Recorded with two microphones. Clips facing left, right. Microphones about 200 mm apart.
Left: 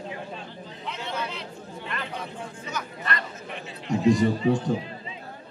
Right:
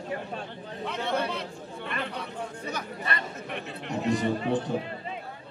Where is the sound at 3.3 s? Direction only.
60° right (ahead or behind).